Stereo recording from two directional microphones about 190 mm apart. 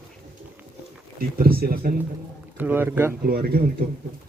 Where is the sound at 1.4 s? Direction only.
50° right (ahead or behind).